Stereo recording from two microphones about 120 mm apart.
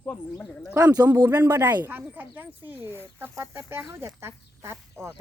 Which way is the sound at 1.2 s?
20° right (ahead or behind).